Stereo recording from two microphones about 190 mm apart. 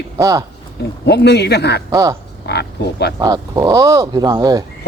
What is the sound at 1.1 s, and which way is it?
Speech, 60° left (ahead or behind).